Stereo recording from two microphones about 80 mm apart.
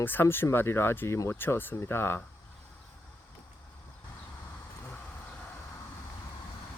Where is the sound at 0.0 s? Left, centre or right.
Left.